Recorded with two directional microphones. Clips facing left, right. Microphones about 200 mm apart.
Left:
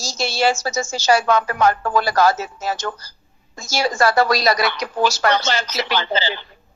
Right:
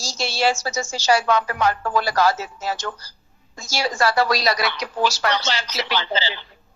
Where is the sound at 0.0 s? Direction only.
45° left (ahead or behind).